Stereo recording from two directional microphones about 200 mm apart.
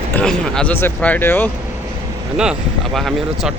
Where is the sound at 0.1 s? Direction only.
5° left (ahead or behind).